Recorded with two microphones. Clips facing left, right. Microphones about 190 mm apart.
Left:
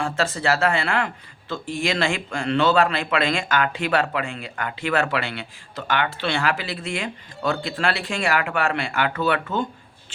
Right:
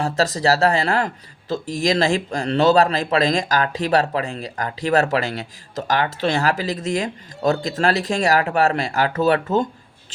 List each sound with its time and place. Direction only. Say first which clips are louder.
0.0 s speech: right 4 dB; 40° right (ahead or behind)